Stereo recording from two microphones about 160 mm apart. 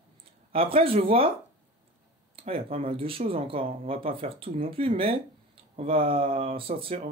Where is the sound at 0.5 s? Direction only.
35° right (ahead or behind).